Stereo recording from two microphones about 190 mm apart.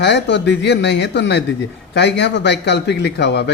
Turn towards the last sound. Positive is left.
turn(degrees=65)  # may be behind; listen again after turning